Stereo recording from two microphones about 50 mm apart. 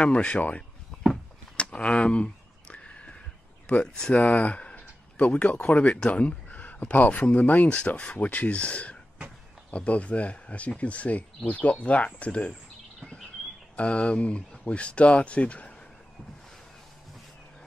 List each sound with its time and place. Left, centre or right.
0.0 s speech: left
1.6 s a sound: left
3.6 s speech: left
4.1 s speech: left
13.7 s speech: left